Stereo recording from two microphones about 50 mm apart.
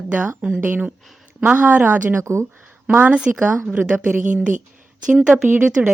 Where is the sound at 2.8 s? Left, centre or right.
Right.